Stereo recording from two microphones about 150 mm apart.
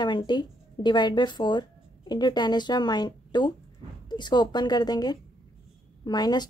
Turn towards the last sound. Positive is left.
turn(degrees=25)  # may be behind; listen again after turning